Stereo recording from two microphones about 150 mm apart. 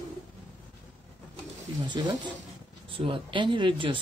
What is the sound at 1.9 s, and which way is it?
Speech, 25° right (ahead or behind).